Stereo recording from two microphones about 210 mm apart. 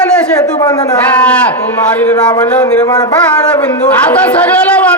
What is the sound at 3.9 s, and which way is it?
A man's voice, 5° left (ahead or behind).